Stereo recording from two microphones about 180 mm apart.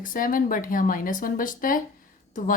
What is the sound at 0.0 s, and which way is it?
A woman's voice, 50° left (ahead or behind).